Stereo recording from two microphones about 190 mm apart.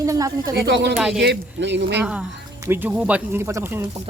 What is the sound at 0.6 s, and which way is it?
Speech, 60° right (ahead or behind).